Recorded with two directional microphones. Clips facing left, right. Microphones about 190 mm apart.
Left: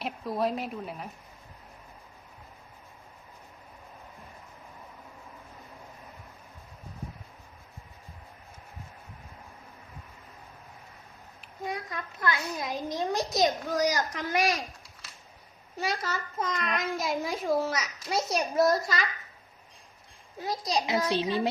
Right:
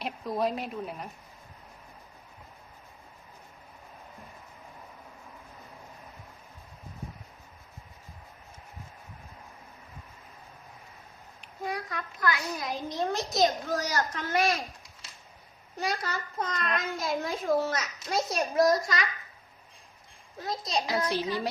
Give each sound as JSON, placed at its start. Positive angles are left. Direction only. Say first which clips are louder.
{"t": 0.0, "sound": "a woman's voice", "louder": "even", "side_deg": 0}
{"t": 11.6, "sound": "a sound", "louder": "right 1 dB", "side_deg": 20}
{"t": 13.0, "sound": "a child's voice", "louder": "right 1 dB", "side_deg": 15}
{"t": 15.8, "sound": "a child's voice", "louder": "even", "side_deg": 5}
{"t": 20.4, "sound": "a child's voice", "louder": "left 2 dB", "side_deg": 20}